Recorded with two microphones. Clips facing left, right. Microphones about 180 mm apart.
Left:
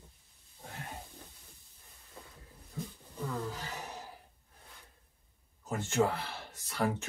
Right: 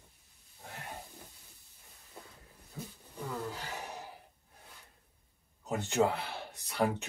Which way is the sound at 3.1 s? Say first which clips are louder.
Left 1 dB; 15° right (ahead or behind).